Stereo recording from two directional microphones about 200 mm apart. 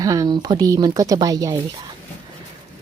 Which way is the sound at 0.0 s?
15° right (ahead or behind).